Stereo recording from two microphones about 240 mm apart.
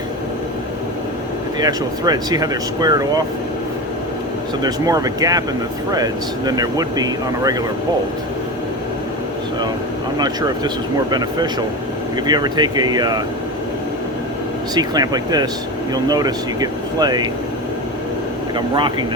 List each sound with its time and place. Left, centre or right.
1.5 s speech: centre
4.6 s speech: centre
10.2 s speech: centre
12.1 s speech: centre
14.8 s speech: centre
18.5 s speech: centre